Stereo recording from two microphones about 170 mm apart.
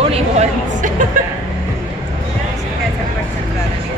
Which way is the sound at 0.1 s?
40° right (ahead or behind).